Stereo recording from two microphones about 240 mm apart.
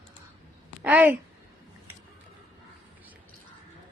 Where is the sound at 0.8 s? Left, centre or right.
Centre.